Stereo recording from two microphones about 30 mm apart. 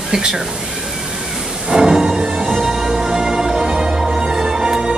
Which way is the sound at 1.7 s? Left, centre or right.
Right.